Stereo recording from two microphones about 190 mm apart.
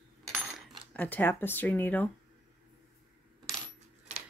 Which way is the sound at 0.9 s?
10° left (ahead or behind).